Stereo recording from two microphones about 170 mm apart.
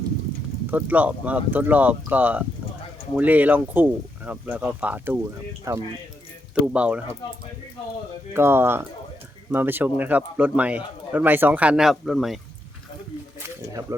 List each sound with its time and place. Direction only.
0.7 s a man's voice: 10° right (ahead or behind)
6.6 s a man's voice: 5° right (ahead or behind)
8.3 s a man's voice: 15° right (ahead or behind)